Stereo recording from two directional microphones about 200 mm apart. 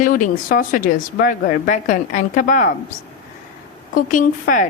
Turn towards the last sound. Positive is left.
turn(degrees=40)  # may be behind; listen again after turning